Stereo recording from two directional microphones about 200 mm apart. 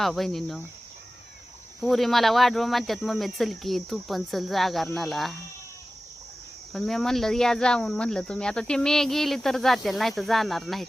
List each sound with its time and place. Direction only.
0.0 s speech: centre (ahead or behind)
1.8 s speech: centre (ahead or behind)
6.7 s speech: centre (ahead or behind)